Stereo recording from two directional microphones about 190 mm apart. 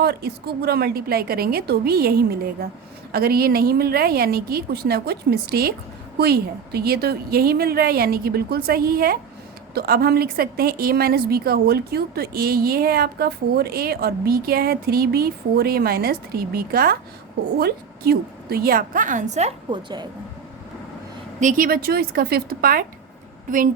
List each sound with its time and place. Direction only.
0.0 s a woman's voice: 55° right (ahead or behind); by 20.1 s 25° right (ahead or behind)
21.4 s a woman's voice: 45° right (ahead or behind)